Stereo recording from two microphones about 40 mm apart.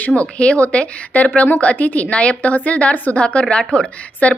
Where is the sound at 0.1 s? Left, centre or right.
Left.